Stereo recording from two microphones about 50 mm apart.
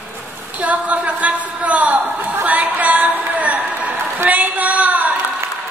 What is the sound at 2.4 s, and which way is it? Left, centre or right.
Chatter, right.